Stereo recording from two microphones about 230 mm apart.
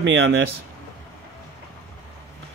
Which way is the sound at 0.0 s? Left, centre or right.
Right.